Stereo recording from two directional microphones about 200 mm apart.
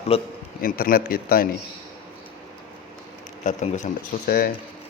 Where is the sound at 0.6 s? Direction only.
45° left (ahead or behind).